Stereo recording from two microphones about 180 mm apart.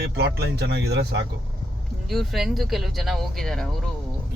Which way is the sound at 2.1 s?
Centre (ahead or behind).